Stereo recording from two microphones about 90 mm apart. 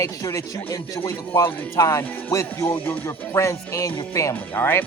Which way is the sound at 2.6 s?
20° left (ahead or behind).